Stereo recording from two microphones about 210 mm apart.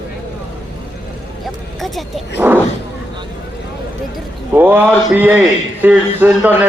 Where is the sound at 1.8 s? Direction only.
5° right (ahead or behind).